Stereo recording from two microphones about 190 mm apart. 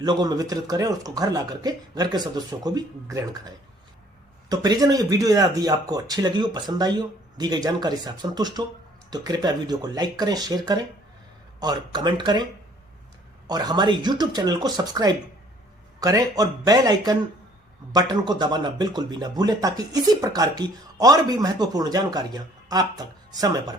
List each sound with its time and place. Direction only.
0.0 s speech: 20° right (ahead or behind)
13.5 s speech: 20° right (ahead or behind)